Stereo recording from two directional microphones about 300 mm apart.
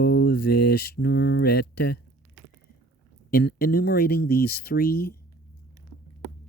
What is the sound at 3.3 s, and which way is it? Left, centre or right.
Speech, left.